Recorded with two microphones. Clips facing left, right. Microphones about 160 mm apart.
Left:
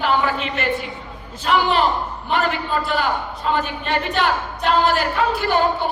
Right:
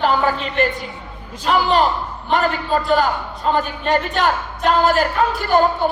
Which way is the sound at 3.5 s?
40° right (ahead or behind).